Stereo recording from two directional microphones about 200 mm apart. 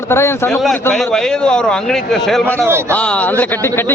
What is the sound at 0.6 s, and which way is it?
A man's voice, centre (ahead or behind).